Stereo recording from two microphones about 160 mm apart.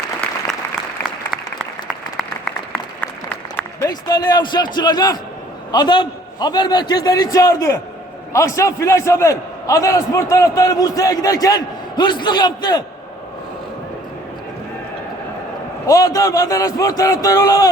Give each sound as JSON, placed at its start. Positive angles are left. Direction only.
{"t": 3.8, "sound": "a man's voice", "side_deg": 25}
{"t": 15.9, "sound": "a man's voice", "side_deg": 20}